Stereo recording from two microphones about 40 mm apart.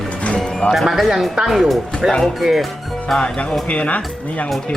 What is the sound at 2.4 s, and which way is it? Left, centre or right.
Speech, centre.